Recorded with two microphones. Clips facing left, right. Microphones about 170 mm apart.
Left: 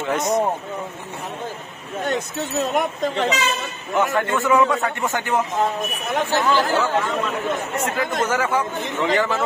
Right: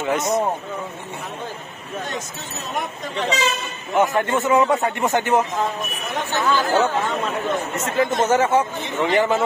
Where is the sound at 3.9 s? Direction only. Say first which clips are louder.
Right 2 dB; 20° right (ahead or behind).